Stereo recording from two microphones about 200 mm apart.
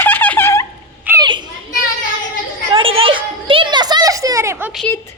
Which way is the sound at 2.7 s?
25° right (ahead or behind).